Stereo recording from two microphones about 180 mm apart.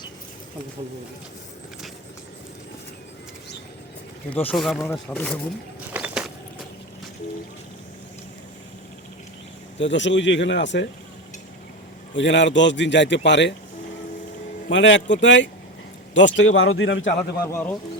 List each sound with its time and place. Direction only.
4.3 s speech: 5° left (ahead or behind)
5.9 s vehicle: 5° right (ahead or behind)
9.7 s a man's voice: 85° left
12.1 s a man's voice: 90° left
14.7 s a man's voice: 90° left
17.4 s speech: 10° left (ahead or behind)